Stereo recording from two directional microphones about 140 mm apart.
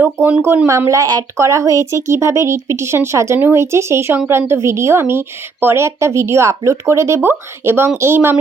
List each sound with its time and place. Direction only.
0.0 s speech: 10° right (ahead or behind)